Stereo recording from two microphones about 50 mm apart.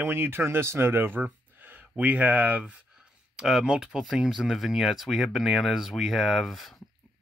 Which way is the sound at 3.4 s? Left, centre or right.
Centre.